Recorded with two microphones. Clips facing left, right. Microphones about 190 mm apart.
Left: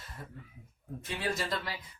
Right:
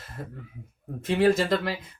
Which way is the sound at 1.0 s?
90° right.